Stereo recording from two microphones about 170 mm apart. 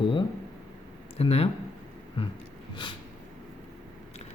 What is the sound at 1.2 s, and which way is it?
Speech, 35° left (ahead or behind).